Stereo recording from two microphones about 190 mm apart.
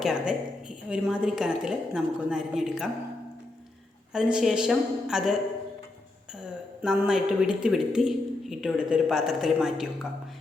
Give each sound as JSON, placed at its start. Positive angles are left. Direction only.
{"t": 0.0, "sound": "speech", "side_deg": -5}
{"t": 4.1, "sound": "speech", "side_deg": -5}
{"t": 6.8, "sound": "speech", "side_deg": -5}